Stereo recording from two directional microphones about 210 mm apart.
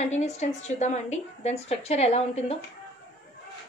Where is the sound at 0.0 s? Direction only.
35° left (ahead or behind).